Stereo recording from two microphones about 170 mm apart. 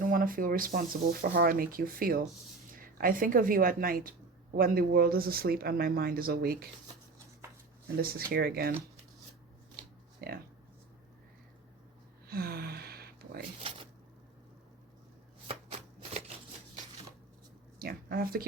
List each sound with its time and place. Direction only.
0.0 s speech: 55° right (ahead or behind)
7.9 s speech: 65° right (ahead or behind)
10.2 s speech: 65° right (ahead or behind)
12.3 s a sound: 65° right (ahead or behind)
13.6 s a sound: 30° right (ahead or behind)
15.4 s shuffling cards: 40° right (ahead or behind)
17.7 s speech: 60° right (ahead or behind)